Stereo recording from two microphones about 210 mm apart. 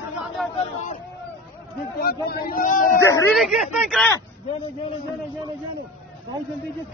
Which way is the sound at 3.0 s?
10° left (ahead or behind).